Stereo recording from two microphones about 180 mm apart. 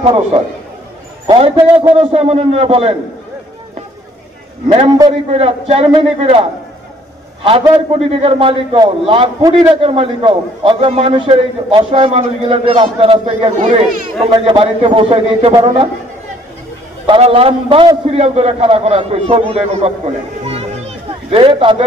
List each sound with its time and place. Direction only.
0.0 s a man's voice: 30° right (ahead or behind)
4.6 s a man's voice: 30° right (ahead or behind)
7.4 s a man's voice: 30° right (ahead or behind)
17.0 s a man's voice: 30° right (ahead or behind)
20.4 s a sound: 35° right (ahead or behind)